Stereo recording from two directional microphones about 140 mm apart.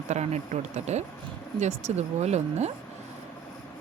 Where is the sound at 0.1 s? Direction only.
50° right (ahead or behind).